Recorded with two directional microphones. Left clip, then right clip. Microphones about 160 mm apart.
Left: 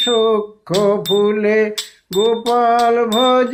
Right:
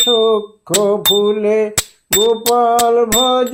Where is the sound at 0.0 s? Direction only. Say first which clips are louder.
Right 2 dB; 45° right (ahead or behind).